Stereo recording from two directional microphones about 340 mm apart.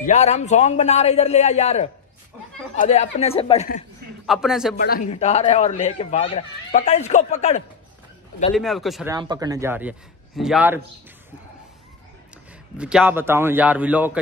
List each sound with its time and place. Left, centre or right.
0.0 s speech: centre
4.3 s a man's voice: centre
4.7 s speech: left
8.5 s a man's voice: centre
9.1 s a man's voice: centre
12.7 s a man's voice: centre